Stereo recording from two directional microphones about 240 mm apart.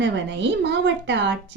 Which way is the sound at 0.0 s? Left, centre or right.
Right.